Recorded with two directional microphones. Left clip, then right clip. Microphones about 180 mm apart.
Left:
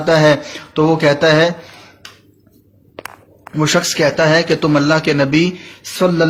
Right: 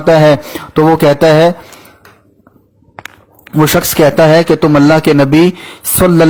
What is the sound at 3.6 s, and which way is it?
Speech, 60° right (ahead or behind).